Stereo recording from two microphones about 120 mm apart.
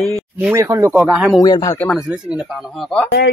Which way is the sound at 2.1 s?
10° right (ahead or behind).